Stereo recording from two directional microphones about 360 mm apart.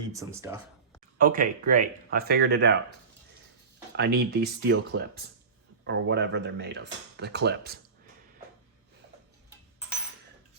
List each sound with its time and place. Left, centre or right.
0.1 s speech: centre
1.2 s speech: right
3.9 s speech: right